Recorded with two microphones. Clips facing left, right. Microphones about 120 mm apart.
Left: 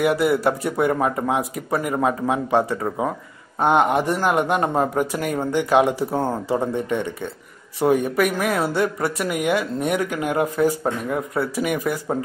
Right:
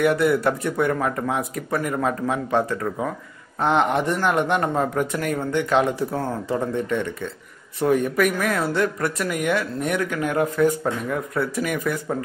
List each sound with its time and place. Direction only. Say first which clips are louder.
0.0 s speech: even; 5° left (ahead or behind)
0.9 s speech: left 2 dB; 20° left (ahead or behind)